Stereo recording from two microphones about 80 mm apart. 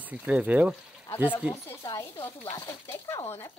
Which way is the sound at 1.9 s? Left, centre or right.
Left.